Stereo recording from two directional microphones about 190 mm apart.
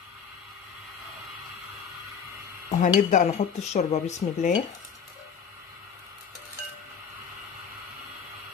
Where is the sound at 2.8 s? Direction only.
40° left (ahead or behind).